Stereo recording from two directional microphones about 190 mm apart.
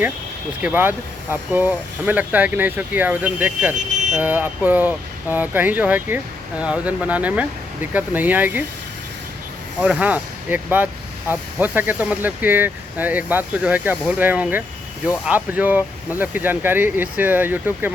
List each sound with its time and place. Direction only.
0.6 s speech: 10° right (ahead or behind)
3.8 s vehicle: 40° right (ahead or behind)
4.2 s speech: 10° right (ahead or behind)
9.8 s speech: 10° right (ahead or behind)